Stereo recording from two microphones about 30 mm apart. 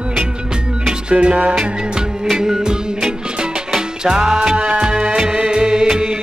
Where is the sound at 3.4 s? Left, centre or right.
Right.